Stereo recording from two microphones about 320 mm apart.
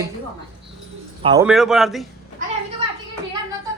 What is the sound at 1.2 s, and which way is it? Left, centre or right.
Speech, centre.